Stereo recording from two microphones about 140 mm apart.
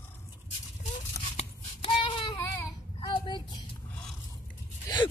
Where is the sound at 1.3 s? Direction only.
40° left (ahead or behind).